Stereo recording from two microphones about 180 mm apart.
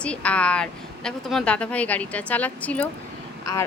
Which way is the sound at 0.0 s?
5° left (ahead or behind).